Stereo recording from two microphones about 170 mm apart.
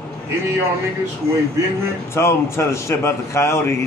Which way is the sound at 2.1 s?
15° left (ahead or behind).